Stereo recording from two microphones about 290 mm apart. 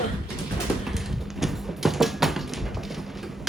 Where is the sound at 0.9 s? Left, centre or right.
Centre.